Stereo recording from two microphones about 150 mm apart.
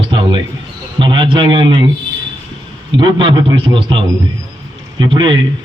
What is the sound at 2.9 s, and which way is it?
A man's voice, 30° right (ahead or behind).